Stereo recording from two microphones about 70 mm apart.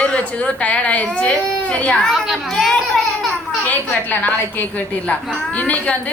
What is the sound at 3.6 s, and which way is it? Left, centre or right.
A woman's voice, left.